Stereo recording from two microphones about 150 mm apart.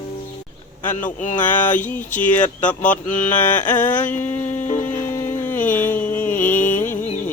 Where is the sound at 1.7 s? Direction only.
10° left (ahead or behind).